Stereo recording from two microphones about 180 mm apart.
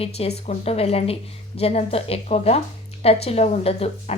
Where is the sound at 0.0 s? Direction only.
35° left (ahead or behind).